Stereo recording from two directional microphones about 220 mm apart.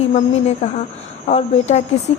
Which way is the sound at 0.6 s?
30° left (ahead or behind).